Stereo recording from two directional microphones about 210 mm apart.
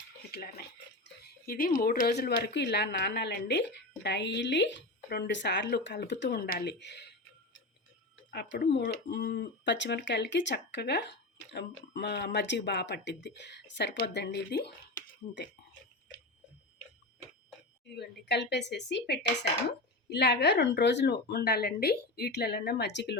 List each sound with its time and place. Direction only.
0.3 s speech: 45° left (ahead or behind)
8.3 s speech: 50° left (ahead or behind)
17.9 s speech: 50° left (ahead or behind)